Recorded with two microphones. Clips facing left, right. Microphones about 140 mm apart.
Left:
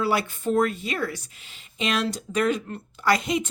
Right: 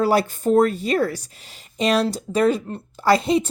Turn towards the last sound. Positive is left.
turn(degrees=-30)  # may be behind; listen again after turning